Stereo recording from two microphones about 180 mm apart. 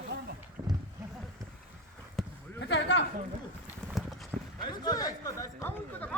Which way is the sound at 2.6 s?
70° left (ahead or behind).